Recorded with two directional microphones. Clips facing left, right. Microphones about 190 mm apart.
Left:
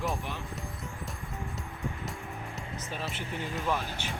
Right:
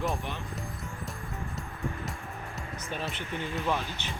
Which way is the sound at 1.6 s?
15° left (ahead or behind).